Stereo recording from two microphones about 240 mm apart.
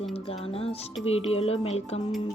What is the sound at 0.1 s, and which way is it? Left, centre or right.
Music, left.